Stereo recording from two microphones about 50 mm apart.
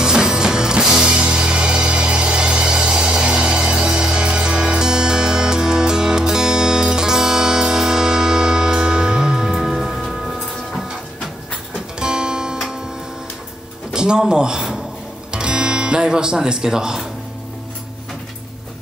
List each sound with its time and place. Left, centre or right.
0.0 s music: centre
12.0 s music: centre
13.9 s a sound: centre
15.3 s music: centre